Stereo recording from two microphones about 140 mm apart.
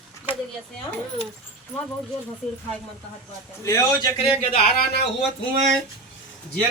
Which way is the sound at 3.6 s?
20° left (ahead or behind).